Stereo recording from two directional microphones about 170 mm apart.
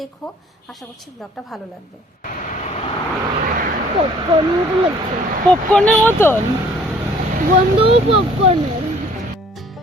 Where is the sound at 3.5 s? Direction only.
55° right (ahead or behind).